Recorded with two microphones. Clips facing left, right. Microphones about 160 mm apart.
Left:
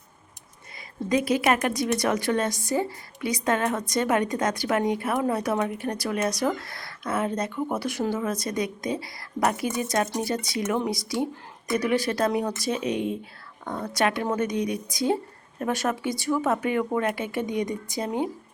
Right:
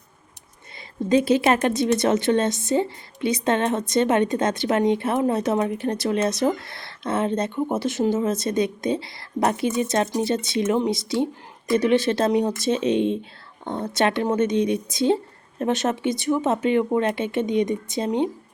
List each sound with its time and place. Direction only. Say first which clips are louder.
1.0 s a woman's voice: right 4 dB; 30° right (ahead or behind)